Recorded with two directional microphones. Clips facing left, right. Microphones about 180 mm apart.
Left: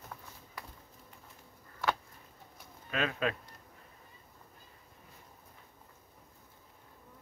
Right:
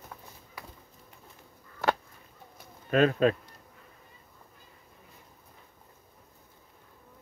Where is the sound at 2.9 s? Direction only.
40° right (ahead or behind).